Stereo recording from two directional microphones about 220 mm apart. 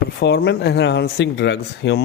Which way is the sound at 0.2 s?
45° left (ahead or behind).